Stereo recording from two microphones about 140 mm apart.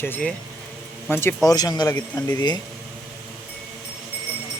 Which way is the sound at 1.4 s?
30° left (ahead or behind).